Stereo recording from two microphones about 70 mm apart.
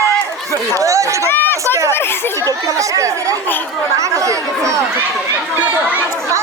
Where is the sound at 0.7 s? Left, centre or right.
Right.